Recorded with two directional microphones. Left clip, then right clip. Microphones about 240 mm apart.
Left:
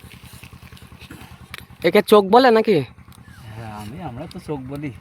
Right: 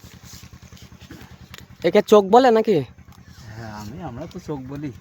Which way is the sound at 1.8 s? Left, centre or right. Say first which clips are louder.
Left 1 dB; centre.